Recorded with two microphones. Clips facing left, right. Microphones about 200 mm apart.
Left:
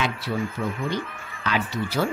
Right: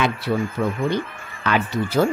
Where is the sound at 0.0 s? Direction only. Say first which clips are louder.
Right 5 dB; 55° right (ahead or behind).